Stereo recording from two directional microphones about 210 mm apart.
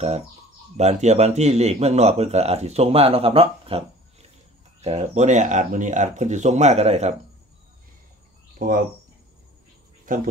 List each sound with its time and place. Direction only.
0.7 s speech: 30° right (ahead or behind)
8.5 s speech: 40° right (ahead or behind)
10.1 s speech: 40° right (ahead or behind)